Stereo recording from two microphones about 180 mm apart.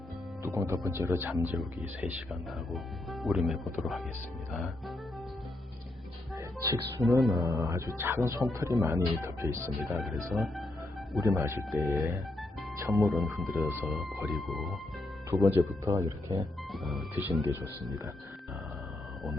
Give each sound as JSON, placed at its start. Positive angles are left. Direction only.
{"t": 0.4, "sound": "speech", "side_deg": -15}
{"t": 6.3, "sound": "speech", "side_deg": -15}
{"t": 10.0, "sound": "speech", "side_deg": 0}
{"t": 11.2, "sound": "speech", "side_deg": -15}
{"t": 15.3, "sound": "speech", "side_deg": -10}
{"t": 16.7, "sound": "speech", "side_deg": 0}
{"t": 17.4, "sound": "speech", "side_deg": -10}